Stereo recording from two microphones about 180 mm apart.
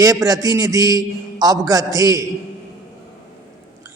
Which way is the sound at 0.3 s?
20° right (ahead or behind).